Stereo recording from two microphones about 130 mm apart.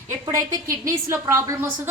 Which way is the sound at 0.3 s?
25° right (ahead or behind).